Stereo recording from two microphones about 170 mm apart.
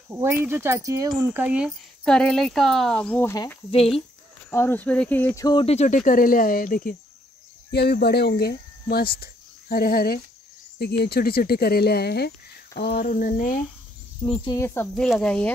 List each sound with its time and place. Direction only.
0.1 s speech: 15° right (ahead or behind)
2.0 s speech: 5° left (ahead or behind)
4.5 s speech: 15° left (ahead or behind)
5.8 s speech: 50° left (ahead or behind)
7.7 s speech: 70° left (ahead or behind)
10.8 s speech: 70° left (ahead or behind)
13.1 s cricket: 55° left (ahead or behind)
14.2 s speech: 30° left (ahead or behind)
14.5 s speech: 15° left (ahead or behind)
15.0 s speech: 5° left (ahead or behind)